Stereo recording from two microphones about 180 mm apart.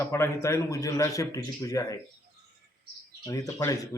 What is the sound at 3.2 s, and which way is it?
Speech, 20° left (ahead or behind).